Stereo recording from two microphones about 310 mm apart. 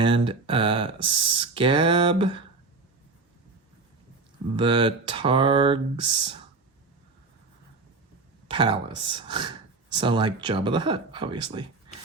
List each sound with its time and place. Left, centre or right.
0.0 s speech: centre
4.5 s speech: centre
8.4 s speech: centre